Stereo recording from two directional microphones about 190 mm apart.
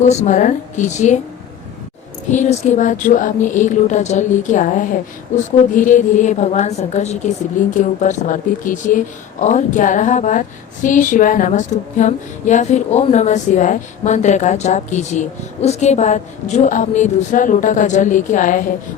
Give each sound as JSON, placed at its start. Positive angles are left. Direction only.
{"t": 0.0, "sound": "speech", "side_deg": 35}
{"t": 2.3, "sound": "speech", "side_deg": 40}